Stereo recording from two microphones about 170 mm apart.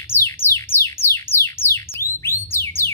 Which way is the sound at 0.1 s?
15° left (ahead or behind).